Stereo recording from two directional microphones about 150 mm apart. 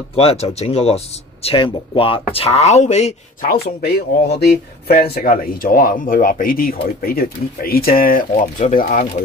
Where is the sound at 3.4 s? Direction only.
90° left.